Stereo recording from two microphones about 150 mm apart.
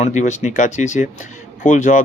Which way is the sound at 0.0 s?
50° left (ahead or behind).